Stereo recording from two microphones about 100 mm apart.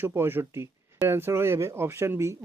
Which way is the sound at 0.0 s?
25° right (ahead or behind).